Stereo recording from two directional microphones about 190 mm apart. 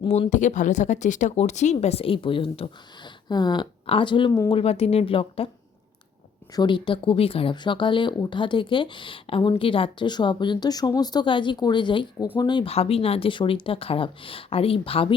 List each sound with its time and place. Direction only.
0.0 s speech: 35° left (ahead or behind)
4.5 s speech: 30° left (ahead or behind)
6.6 s speech: 25° left (ahead or behind)